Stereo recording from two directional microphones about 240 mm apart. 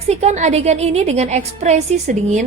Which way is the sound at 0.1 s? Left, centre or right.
Right.